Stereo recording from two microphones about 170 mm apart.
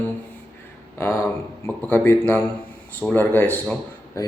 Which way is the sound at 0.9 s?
15° left (ahead or behind).